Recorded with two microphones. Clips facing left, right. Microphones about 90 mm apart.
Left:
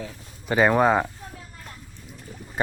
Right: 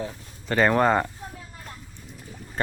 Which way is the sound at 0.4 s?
10° left (ahead or behind).